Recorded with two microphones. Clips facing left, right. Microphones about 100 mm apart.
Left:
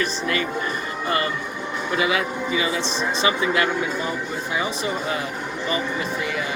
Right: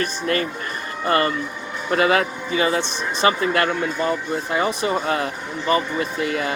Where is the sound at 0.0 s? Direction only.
45° right (ahead or behind).